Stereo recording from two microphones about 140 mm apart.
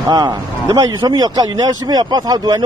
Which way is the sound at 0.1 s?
30° right (ahead or behind).